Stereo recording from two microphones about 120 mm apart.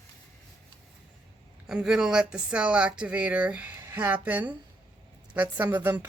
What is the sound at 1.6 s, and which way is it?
Speech, 5° right (ahead or behind).